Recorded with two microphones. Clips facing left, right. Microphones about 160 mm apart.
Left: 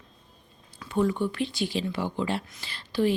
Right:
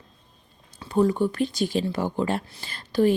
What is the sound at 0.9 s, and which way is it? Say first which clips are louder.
Speech: right 4 dB; 40° right (ahead or behind).